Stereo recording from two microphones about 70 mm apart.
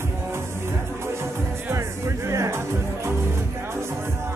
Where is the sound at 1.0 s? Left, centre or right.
Right.